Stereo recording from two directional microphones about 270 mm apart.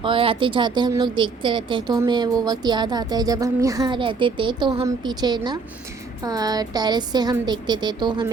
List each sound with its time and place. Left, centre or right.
0.0 s speech: centre